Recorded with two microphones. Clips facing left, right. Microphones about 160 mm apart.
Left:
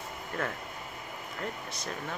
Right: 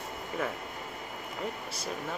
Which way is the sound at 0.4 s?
10° right (ahead or behind).